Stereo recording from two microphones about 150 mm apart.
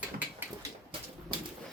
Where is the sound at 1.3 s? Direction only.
35° right (ahead or behind).